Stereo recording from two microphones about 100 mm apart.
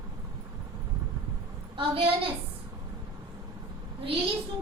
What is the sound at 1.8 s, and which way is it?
Speech, 65° right (ahead or behind).